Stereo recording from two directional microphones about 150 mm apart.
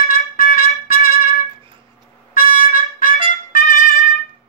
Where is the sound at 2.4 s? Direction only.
70° left (ahead or behind).